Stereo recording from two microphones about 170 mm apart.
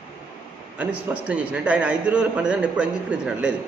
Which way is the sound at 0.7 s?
10° right (ahead or behind).